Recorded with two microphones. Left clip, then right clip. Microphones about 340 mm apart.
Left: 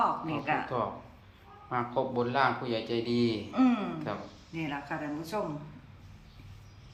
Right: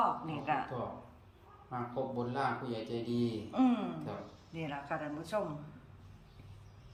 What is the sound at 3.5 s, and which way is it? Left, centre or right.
A woman's voice, centre.